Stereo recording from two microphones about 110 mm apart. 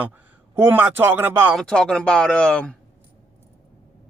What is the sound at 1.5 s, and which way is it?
Speech, 5° left (ahead or behind).